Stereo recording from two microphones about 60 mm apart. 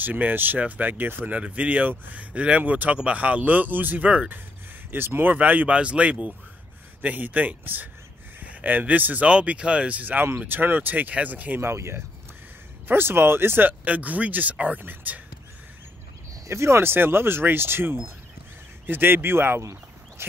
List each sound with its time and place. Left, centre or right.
0.0 s speech: right
4.9 s speech: right
5.3 s speech: right
11.6 s speech: right
16.4 s speech: right
16.9 s speech: right
19.6 s a sound: right